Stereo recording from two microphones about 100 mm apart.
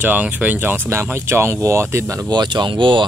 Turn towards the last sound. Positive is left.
turn(degrees=-55)  # may be behind; listen again after turning